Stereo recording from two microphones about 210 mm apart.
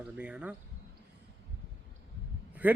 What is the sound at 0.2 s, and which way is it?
Speech, 5° right (ahead or behind).